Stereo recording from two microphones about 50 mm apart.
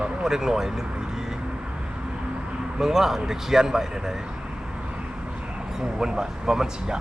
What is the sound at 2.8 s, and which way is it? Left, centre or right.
Speech, centre.